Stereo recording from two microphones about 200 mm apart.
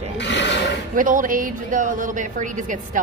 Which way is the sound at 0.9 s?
40° right (ahead or behind).